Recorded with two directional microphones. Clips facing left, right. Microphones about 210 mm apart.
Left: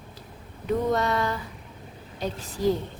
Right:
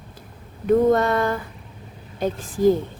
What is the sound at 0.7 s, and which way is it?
A woman's voice, 50° right (ahead or behind).